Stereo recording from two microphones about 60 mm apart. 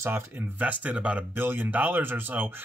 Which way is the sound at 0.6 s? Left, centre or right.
Right.